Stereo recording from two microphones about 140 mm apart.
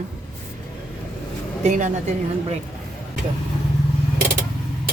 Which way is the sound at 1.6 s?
60° right (ahead or behind).